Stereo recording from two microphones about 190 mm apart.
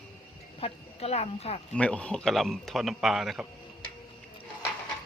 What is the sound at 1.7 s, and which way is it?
A man's voice, 5° left (ahead or behind).